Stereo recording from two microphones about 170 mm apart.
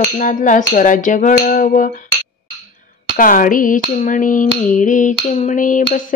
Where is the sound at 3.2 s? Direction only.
55° left (ahead or behind).